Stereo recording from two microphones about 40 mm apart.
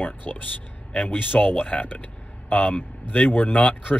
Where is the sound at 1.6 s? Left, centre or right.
Left.